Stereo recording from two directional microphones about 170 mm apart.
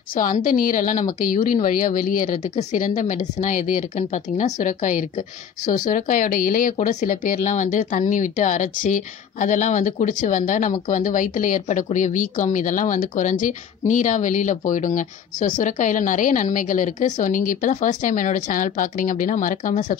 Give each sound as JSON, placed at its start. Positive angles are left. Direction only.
{"t": 0.1, "sound": "a woman's voice", "side_deg": 55}